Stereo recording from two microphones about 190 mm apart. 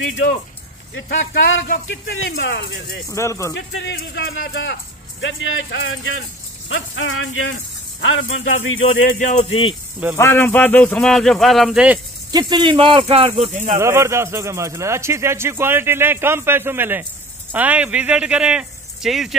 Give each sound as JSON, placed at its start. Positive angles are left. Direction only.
{"t": 0.0, "sound": "speech", "side_deg": 70}
{"t": 3.1, "sound": "speech", "side_deg": 15}
{"t": 3.5, "sound": "speech", "side_deg": 70}
{"t": 9.2, "sound": "speech", "side_deg": 35}
{"t": 10.1, "sound": "speech", "side_deg": 10}
{"t": 12.3, "sound": "speech", "side_deg": -20}
{"t": 13.7, "sound": "a man's voice", "side_deg": -15}